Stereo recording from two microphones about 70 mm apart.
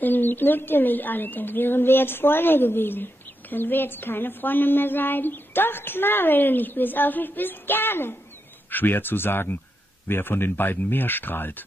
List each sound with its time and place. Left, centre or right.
0.0 s speech: left